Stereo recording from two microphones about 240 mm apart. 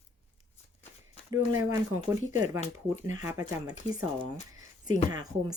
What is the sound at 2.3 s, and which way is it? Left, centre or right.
Speech, left.